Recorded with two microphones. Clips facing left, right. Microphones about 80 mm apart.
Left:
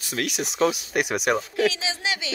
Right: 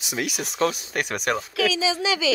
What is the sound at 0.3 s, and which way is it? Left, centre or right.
Speech, centre.